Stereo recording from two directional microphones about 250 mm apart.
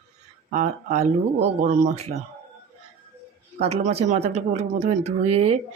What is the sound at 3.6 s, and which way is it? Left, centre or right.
Speech, right.